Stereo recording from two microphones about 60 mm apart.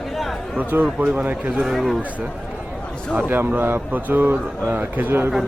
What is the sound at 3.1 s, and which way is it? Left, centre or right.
Speech, right.